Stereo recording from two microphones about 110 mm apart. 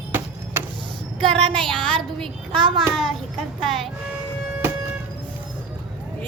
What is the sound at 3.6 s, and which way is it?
Speech, centre (ahead or behind).